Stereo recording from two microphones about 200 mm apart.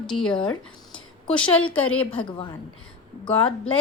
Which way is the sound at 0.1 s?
5° left (ahead or behind).